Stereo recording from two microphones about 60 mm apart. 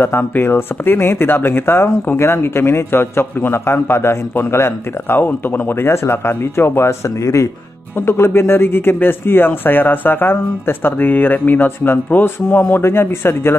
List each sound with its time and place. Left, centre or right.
0.0 s speech: left
8.1 s speech: left